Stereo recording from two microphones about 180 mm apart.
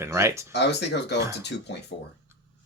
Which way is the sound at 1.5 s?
90° left.